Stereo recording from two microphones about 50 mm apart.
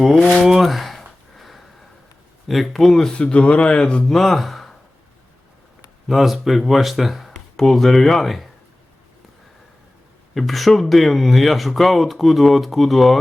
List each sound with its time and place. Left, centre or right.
0.4 s a sound: centre
2.5 s speech: centre
3.2 s speech: left
4.1 s speech: centre
6.1 s speech: centre
10.3 s speech: centre